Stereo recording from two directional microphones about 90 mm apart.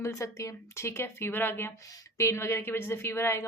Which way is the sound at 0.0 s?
35° left (ahead or behind).